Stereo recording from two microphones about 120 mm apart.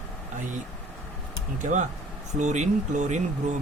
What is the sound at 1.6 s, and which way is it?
Speech, 90° right.